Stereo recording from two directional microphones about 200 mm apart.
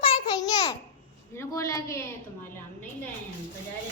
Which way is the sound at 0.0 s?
25° left (ahead or behind).